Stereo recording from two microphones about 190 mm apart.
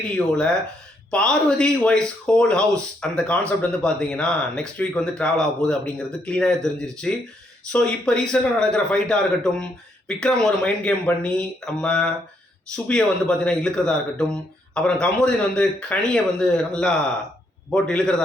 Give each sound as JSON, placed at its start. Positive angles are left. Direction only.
{"t": 0.2, "sound": "speech", "side_deg": 5}